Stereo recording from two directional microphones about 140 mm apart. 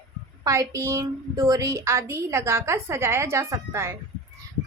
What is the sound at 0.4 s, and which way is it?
A woman's voice, 25° right (ahead or behind).